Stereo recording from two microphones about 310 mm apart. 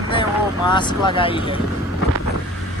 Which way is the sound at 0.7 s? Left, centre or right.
Centre.